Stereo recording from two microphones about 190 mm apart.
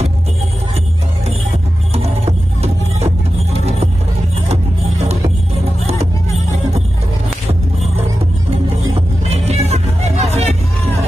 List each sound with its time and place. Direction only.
2.0 s music: 35° right (ahead or behind)
9.3 s music: 35° right (ahead or behind)